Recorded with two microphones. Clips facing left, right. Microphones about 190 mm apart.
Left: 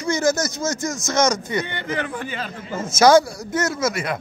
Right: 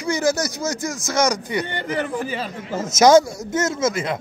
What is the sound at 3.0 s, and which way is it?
A man's voice, 20° right (ahead or behind).